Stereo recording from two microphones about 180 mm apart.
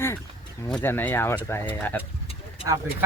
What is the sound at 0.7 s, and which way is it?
Speech, 10° left (ahead or behind).